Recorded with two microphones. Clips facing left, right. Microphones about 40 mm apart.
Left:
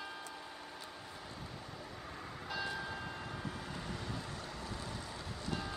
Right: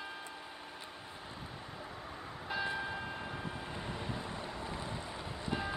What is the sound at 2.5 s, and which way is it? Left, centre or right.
Train, right.